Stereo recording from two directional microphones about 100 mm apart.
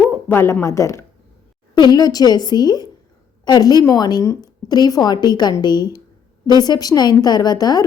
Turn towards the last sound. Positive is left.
turn(degrees=40)  # may be behind; listen again after turning